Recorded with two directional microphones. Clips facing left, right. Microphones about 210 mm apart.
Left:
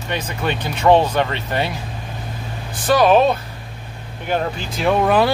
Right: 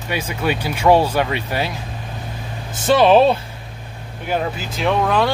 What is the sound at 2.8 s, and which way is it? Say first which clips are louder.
Speech: right 1 dB; 25° right (ahead or behind).